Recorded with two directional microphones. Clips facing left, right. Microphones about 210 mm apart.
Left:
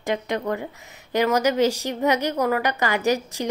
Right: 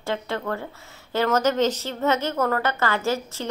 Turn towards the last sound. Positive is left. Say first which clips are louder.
# left 3 dB
turn(degrees=15)  # may be behind; listen again after turning